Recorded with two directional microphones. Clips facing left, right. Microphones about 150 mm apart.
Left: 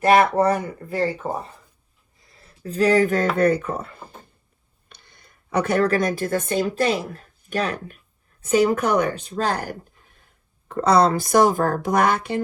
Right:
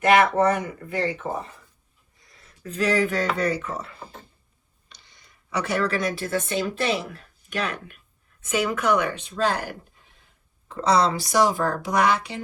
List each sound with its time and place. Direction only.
0.0 s a woman's voice: 35° left (ahead or behind)
2.3 s a woman's voice: 30° left (ahead or behind); by 12.4 s 50° left (ahead or behind)